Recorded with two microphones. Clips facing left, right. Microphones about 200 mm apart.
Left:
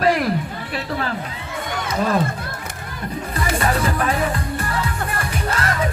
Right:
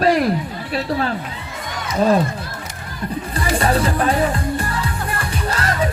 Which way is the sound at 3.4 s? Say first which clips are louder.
Right 3 dB; 30° right (ahead or behind).